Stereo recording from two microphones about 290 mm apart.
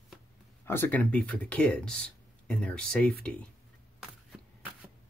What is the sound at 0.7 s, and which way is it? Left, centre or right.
Speech, centre.